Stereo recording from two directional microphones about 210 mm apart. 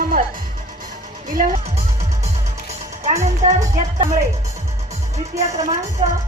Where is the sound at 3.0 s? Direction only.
35° right (ahead or behind).